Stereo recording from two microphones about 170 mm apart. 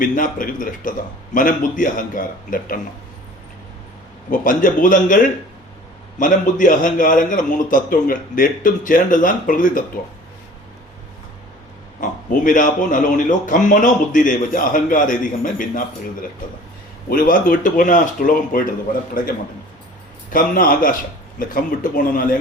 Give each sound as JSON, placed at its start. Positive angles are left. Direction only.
{"t": 0.0, "sound": "a man's voice", "side_deg": 50}
{"t": 4.3, "sound": "a man's voice", "side_deg": 50}
{"t": 11.9, "sound": "a man's voice", "side_deg": 50}
{"t": 17.1, "sound": "a man's voice", "side_deg": 55}
{"t": 20.3, "sound": "speech", "side_deg": 55}